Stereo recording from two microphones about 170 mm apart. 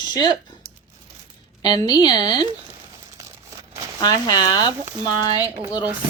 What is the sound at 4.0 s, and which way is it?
A woman's voice, 25° left (ahead or behind).